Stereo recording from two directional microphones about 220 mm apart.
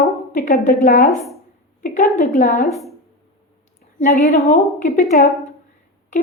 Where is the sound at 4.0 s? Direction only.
35° left (ahead or behind).